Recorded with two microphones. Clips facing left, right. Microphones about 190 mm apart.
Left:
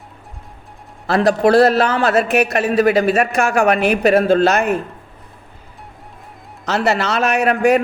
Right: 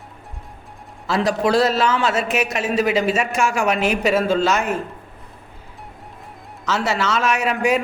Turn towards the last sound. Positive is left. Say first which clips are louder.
# left 5 dB
turn(degrees=60)  # may be behind; listen again after turning